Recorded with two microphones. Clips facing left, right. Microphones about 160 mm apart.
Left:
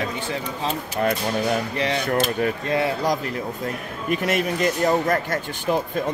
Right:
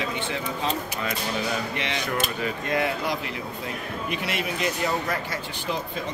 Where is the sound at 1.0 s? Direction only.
55° left (ahead or behind).